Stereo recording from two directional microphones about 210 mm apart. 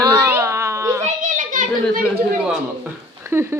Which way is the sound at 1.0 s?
35° right (ahead or behind).